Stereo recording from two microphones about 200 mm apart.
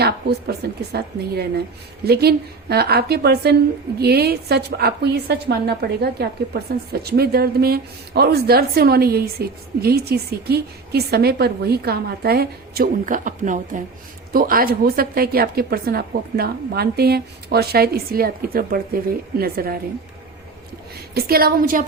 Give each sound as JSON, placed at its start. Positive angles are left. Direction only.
{"t": 0.0, "sound": "a woman's voice", "side_deg": -50}
{"t": 21.2, "sound": "a woman's voice", "side_deg": -50}